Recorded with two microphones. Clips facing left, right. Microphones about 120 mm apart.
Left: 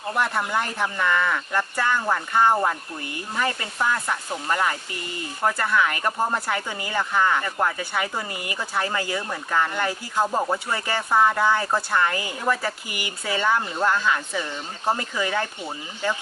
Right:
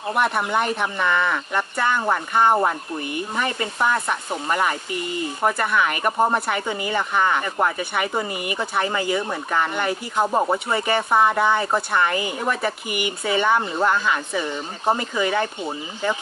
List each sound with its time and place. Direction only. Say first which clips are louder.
0.1 s speech: right 3 dB; 20° right (ahead or behind)